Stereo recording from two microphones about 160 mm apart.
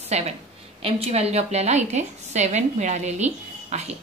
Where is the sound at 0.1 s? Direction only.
45° right (ahead or behind).